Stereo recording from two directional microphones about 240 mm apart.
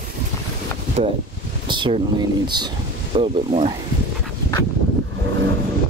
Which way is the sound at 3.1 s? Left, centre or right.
Right.